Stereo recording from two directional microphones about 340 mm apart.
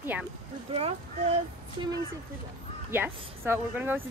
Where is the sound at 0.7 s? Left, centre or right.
Centre.